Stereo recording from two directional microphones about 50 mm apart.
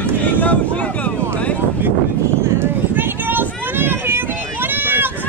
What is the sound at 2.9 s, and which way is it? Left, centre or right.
Run, right.